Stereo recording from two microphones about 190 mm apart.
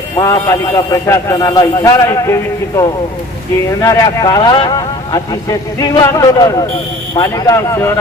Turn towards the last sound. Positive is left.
turn(degrees=15)  # may be behind; listen again after turning